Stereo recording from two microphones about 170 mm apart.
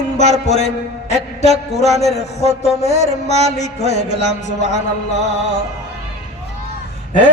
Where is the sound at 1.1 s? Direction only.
40° left (ahead or behind).